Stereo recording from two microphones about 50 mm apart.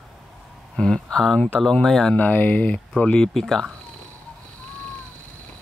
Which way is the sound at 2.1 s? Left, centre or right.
Left.